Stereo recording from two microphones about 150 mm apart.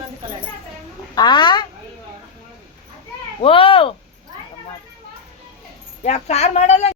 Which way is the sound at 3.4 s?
35° left (ahead or behind).